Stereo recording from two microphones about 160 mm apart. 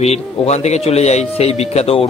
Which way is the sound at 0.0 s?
40° left (ahead or behind).